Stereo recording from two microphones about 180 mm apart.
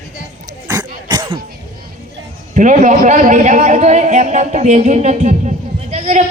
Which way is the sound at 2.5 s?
45° right (ahead or behind).